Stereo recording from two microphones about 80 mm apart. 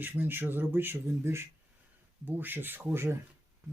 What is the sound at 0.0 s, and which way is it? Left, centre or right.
Speech, right.